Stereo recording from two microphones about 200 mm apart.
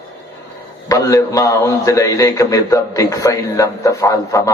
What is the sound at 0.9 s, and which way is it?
A man's voice, 15° left (ahead or behind).